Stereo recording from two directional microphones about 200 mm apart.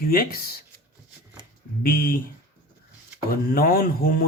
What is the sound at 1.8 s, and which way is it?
Speech, 45° left (ahead or behind).